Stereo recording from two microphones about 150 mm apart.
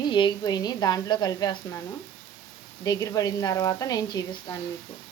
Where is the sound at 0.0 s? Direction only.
30° left (ahead or behind).